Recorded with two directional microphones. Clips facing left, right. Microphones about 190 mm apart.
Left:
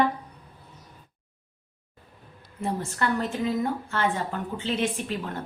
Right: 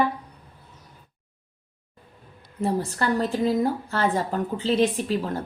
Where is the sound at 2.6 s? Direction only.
35° right (ahead or behind).